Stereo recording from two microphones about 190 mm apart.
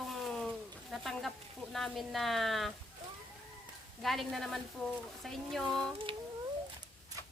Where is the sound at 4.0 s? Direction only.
Centre (ahead or behind).